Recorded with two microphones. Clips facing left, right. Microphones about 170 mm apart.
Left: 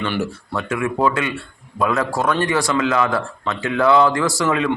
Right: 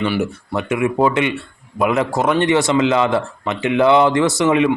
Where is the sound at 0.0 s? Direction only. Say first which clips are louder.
Right 3 dB; 15° right (ahead or behind).